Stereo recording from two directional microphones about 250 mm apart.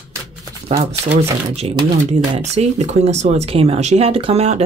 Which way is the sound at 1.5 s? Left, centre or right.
Right.